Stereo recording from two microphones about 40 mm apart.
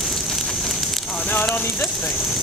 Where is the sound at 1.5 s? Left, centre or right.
Left.